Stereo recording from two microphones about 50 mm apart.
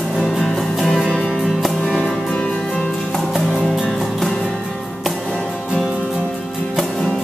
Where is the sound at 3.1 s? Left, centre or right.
Centre.